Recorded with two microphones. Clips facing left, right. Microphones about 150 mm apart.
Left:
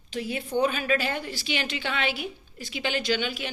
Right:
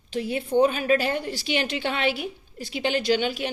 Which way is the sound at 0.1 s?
30° right (ahead or behind).